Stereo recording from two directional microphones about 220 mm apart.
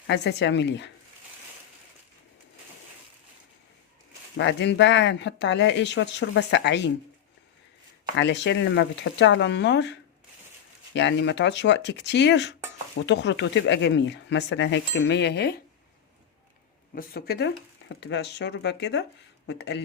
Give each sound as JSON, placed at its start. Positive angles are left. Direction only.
{"t": 0.1, "sound": "speech", "side_deg": 50}
{"t": 4.4, "sound": "speech", "side_deg": 55}
{"t": 8.1, "sound": "speech", "side_deg": 55}
{"t": 16.9, "sound": "speech", "side_deg": 45}